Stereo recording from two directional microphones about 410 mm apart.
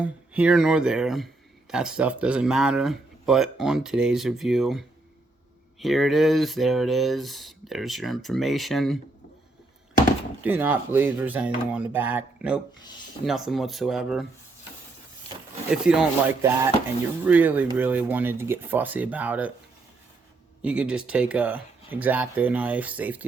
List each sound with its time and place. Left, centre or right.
0.0 s speech: centre
10.4 s speech: centre
15.7 s speech: centre
20.6 s speech: centre